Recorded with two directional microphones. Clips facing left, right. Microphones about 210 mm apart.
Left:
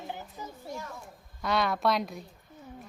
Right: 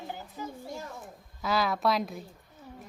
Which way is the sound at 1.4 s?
Centre (ahead or behind).